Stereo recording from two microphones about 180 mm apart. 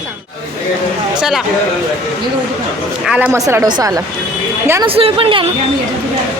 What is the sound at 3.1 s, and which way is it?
Speech, 5° right (ahead or behind).